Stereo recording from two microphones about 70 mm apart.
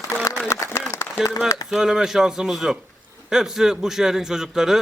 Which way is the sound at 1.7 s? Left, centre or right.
Centre.